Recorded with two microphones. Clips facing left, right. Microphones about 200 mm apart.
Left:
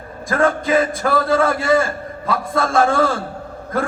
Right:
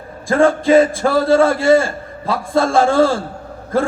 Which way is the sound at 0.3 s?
25° right (ahead or behind).